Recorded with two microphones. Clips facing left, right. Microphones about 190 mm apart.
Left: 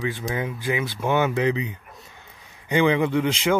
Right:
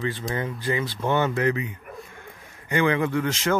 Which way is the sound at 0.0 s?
10° left (ahead or behind).